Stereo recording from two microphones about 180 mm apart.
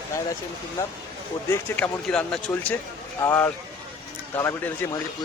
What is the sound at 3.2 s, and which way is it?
Speech, 15° left (ahead or behind).